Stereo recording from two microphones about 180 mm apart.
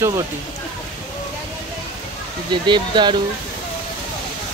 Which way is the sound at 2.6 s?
25° right (ahead or behind).